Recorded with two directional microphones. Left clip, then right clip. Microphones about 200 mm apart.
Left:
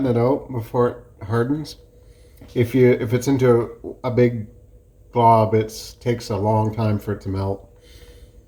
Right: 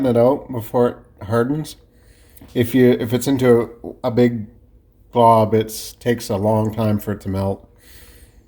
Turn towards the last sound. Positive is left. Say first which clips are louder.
# right 2 dB
turn(degrees=-50)  # may be behind; listen again after turning